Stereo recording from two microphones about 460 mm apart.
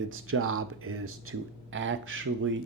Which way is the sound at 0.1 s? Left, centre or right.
Right.